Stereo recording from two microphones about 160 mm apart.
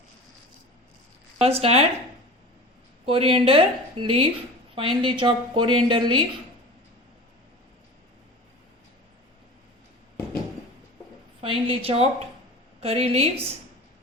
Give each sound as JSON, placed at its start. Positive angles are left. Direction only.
{"t": 1.4, "sound": "a woman's voice", "side_deg": -40}
{"t": 3.1, "sound": "a woman's voice", "side_deg": -35}
{"t": 11.3, "sound": "a woman's voice", "side_deg": -35}